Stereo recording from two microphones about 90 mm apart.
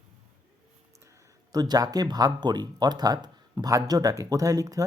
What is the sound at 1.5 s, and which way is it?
Speech, 45° right (ahead or behind).